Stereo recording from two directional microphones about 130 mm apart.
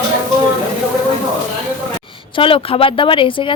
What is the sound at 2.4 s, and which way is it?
Speech, 45° left (ahead or behind).